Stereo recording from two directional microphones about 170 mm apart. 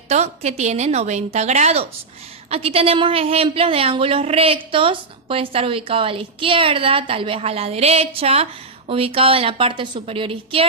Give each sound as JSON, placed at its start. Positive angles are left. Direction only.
{"t": 0.1, "sound": "a woman's voice", "side_deg": -40}